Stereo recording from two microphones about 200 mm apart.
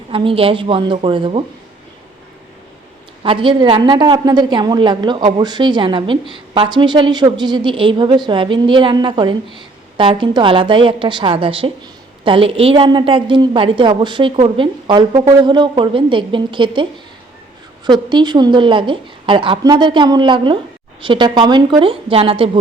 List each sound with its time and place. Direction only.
0.1 s a woman's voice: 25° right (ahead or behind)
3.2 s a woman's voice: 25° right (ahead or behind)
17.8 s a woman's voice: 20° right (ahead or behind)